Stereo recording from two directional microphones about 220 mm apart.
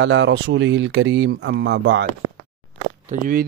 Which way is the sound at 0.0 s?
55° right (ahead or behind).